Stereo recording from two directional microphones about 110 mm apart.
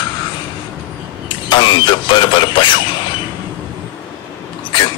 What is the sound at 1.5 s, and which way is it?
Speech, 45° left (ahead or behind).